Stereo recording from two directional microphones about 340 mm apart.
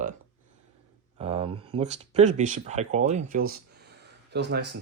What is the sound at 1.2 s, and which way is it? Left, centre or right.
Speech, centre.